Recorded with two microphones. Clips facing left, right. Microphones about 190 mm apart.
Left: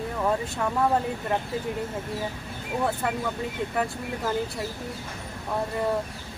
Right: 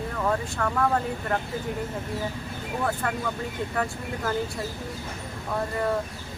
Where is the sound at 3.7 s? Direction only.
10° left (ahead or behind).